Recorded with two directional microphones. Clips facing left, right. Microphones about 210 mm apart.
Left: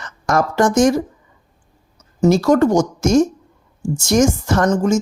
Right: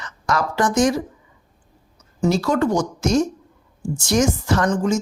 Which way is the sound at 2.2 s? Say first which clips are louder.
Left 6 dB; 45° left (ahead or behind).